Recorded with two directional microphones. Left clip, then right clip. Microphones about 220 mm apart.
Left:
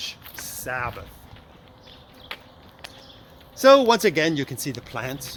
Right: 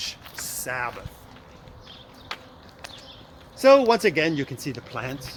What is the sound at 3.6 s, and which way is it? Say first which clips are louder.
Speech: left 1 dB; 40° left (ahead or behind).